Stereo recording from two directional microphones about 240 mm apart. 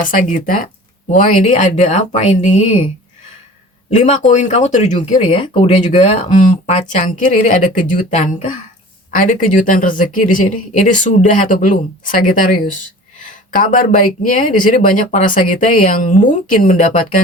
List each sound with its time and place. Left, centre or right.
0.0 s speech: left
3.8 s speech: left